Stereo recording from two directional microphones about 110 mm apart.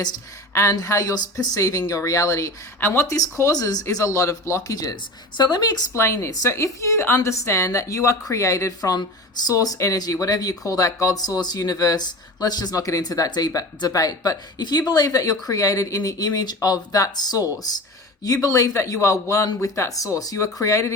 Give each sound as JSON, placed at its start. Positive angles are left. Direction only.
{"t": 0.5, "sound": "a woman's voice", "side_deg": 30}
{"t": 5.9, "sound": "a woman's voice", "side_deg": 25}